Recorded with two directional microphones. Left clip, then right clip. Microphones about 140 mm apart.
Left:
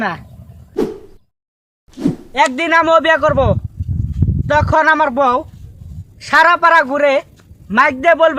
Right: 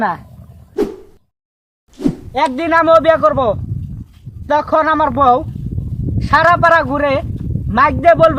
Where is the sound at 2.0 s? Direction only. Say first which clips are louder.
Even; centre (ahead or behind).